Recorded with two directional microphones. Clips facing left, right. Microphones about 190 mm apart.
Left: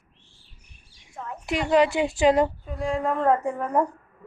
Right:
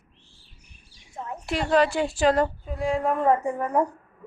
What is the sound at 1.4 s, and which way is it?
A woman's voice, 15° left (ahead or behind).